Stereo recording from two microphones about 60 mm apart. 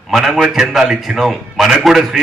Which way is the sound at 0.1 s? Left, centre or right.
Centre.